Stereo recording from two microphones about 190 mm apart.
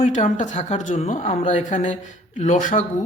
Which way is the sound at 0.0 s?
40° left (ahead or behind).